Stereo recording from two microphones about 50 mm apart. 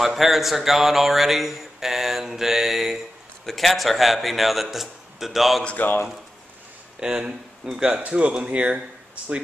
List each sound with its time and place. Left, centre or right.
0.0 s speech: centre
5.8 s a man's voice: left
7.0 s speech: centre